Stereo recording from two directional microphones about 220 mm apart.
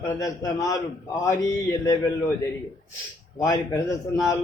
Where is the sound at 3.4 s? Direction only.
15° left (ahead or behind).